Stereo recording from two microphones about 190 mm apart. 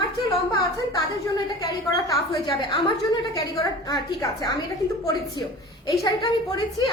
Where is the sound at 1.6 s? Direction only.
20° left (ahead or behind).